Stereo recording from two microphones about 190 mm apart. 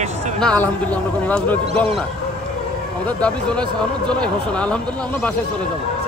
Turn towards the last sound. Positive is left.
turn(degrees=5)  # may be behind; listen again after turning